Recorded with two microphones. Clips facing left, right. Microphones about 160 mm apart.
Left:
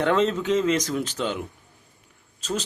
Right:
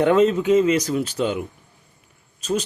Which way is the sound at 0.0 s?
10° right (ahead or behind).